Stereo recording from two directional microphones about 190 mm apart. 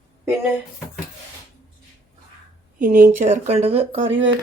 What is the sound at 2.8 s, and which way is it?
Speech, 45° right (ahead or behind).